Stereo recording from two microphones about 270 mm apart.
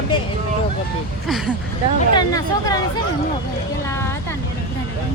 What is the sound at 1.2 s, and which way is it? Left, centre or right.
Speech, centre.